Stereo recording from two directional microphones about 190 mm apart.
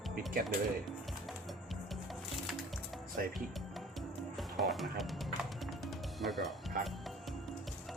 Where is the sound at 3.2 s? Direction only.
50° right (ahead or behind).